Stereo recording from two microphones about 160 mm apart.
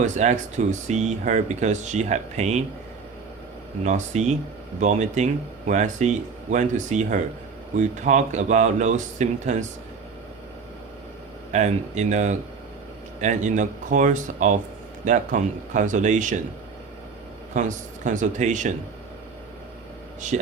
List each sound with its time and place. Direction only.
0.0 s speech: 50° right (ahead or behind)
3.8 s speech: 50° right (ahead or behind)
11.5 s speech: 45° right (ahead or behind)
17.5 s speech: 50° right (ahead or behind)
20.2 s speech: 50° right (ahead or behind)